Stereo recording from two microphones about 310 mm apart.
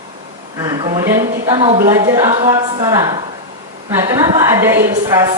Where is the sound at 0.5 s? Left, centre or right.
Centre.